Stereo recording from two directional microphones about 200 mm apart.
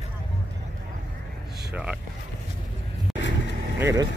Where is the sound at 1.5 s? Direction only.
50° right (ahead or behind).